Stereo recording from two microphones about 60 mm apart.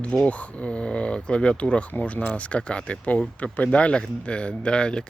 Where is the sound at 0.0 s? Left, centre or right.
Left.